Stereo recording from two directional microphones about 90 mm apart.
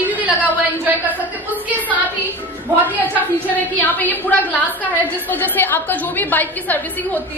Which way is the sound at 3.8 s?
20° left (ahead or behind).